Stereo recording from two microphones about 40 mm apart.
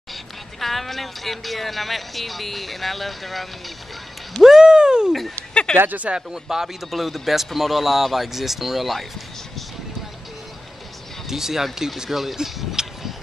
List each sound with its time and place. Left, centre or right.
0.1 s speech: centre
4.4 s a sound: centre
5.5 s a sound: left
6.0 s speech: centre
11.2 s speech: centre
12.8 s vehicle: centre